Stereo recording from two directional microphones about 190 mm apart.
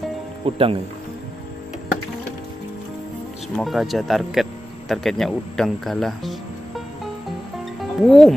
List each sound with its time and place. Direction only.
0.5 s speech: 30° right (ahead or behind)
3.5 s speech: centre (ahead or behind)
7.8 s speech: centre (ahead or behind)